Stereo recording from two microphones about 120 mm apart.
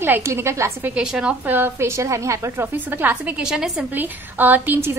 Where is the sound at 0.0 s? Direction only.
20° right (ahead or behind).